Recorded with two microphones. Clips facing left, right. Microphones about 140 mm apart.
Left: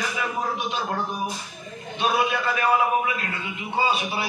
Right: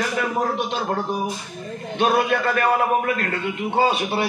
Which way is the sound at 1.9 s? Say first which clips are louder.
Right 4 dB; 60° right (ahead or behind).